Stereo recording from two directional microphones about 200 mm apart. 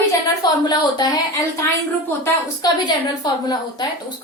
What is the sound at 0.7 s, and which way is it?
A woman's voice, 20° left (ahead or behind).